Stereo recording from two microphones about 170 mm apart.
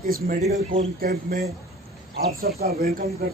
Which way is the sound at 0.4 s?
45° right (ahead or behind).